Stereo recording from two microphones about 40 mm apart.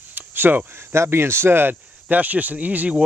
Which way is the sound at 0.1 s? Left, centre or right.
Right.